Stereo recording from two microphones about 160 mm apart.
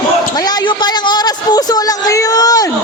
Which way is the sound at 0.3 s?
25° left (ahead or behind).